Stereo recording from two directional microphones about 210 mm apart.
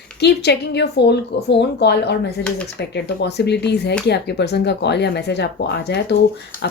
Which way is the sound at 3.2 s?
55° left (ahead or behind).